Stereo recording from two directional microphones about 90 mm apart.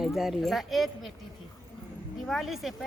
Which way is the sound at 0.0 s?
Centre (ahead or behind).